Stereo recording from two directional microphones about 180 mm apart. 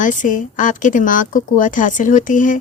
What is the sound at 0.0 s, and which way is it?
A woman's voice, 45° left (ahead or behind).